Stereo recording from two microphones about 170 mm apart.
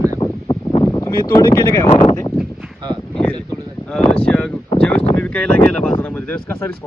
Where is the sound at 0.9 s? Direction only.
20° left (ahead or behind).